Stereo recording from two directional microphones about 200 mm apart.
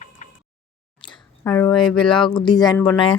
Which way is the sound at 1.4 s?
15° left (ahead or behind).